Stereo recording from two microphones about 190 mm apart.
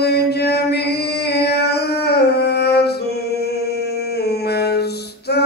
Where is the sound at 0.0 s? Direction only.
60° left (ahead or behind).